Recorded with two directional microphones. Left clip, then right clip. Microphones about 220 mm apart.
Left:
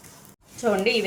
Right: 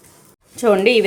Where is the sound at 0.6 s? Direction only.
45° right (ahead or behind).